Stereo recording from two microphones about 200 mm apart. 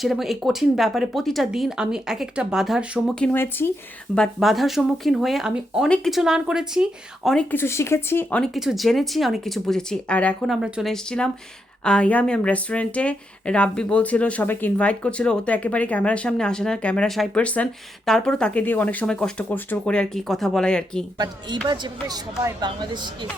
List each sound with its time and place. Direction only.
0.0 s speech: centre (ahead or behind)
7.3 s speech: 5° left (ahead or behind)
21.2 s speech: 20° right (ahead or behind)